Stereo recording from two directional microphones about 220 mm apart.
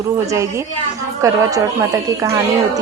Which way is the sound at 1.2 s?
15° right (ahead or behind).